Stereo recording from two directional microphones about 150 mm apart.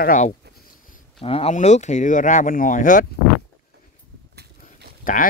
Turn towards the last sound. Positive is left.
turn(degrees=65)  # may be behind; listen again after turning